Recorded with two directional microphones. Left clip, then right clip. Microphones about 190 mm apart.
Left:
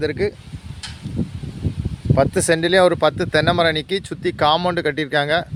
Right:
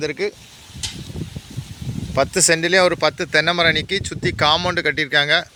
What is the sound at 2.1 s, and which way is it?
Speech, 20° left (ahead or behind).